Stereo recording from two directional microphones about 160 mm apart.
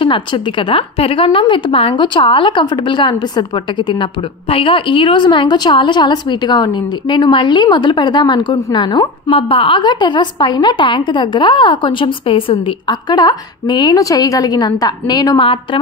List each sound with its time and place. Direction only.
0.0 s a woman's voice: 30° left (ahead or behind)